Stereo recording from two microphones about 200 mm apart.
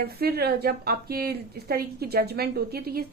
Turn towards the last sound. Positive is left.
turn(degrees=-50)  # may be behind; listen again after turning